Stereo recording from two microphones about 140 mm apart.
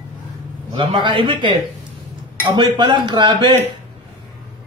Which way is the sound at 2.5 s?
35° right (ahead or behind).